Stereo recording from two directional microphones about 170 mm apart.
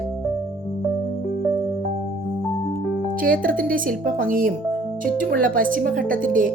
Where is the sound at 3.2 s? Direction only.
55° right (ahead or behind).